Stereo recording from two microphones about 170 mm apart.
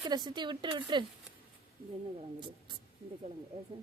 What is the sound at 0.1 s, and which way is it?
Speech, 25° right (ahead or behind).